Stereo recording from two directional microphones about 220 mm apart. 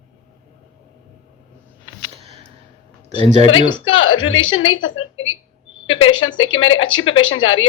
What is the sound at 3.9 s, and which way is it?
A woman's voice, 65° left (ahead or behind).